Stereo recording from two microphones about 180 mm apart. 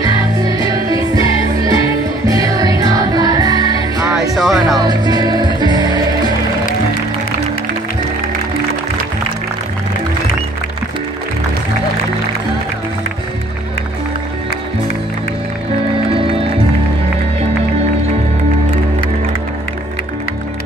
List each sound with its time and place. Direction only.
0.0 s music: 20° right (ahead or behind)
4.4 s speech: centre (ahead or behind)
4.7 s music: 25° right (ahead or behind)